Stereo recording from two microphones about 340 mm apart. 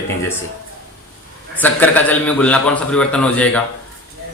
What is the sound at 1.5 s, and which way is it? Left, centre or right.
A man's voice, centre.